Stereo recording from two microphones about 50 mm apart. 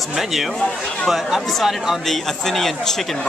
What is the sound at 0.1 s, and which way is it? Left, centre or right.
A man's voice, centre.